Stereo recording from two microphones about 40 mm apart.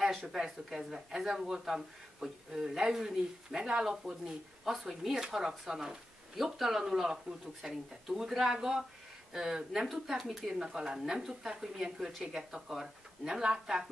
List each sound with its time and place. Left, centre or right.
0.0 s a sound: centre
0.4 s speech: centre
4.2 s speech: centre